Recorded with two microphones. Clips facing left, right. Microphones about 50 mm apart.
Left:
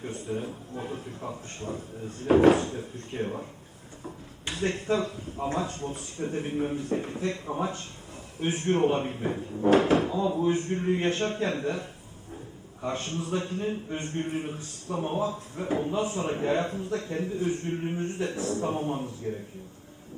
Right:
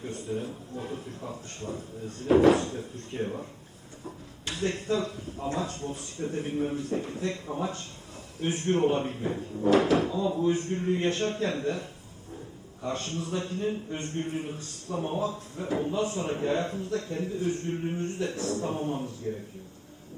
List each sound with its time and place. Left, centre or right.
0.1 s a sound: left
2.4 s a man's voice: left
4.6 s a man's voice: left